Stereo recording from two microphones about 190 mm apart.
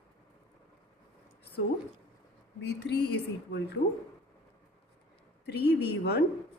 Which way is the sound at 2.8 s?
60° left (ahead or behind).